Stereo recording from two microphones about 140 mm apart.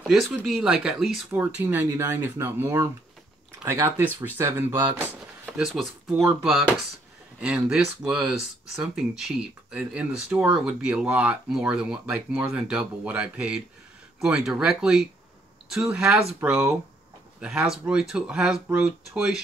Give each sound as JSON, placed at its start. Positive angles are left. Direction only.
{"t": 0.0, "sound": "speech", "side_deg": -5}
{"t": 1.3, "sound": "speech", "side_deg": -15}
{"t": 4.9, "sound": "a sound", "side_deg": -10}
{"t": 5.7, "sound": "speech", "side_deg": 0}